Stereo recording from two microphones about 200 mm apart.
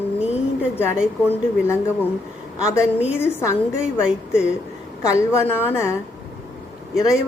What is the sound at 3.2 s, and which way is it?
Speech, 10° left (ahead or behind).